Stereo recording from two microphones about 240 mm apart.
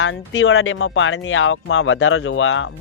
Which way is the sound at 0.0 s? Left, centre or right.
Left.